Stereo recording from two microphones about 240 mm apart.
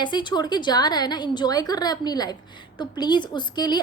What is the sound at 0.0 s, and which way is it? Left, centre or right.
A woman's voice, centre.